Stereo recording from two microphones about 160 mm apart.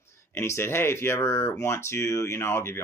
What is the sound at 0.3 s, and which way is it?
Speech, 15° left (ahead or behind).